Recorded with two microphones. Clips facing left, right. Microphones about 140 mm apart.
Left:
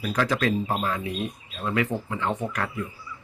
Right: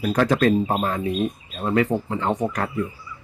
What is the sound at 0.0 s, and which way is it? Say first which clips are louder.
Speech: right 6 dB; 45° right (ahead or behind).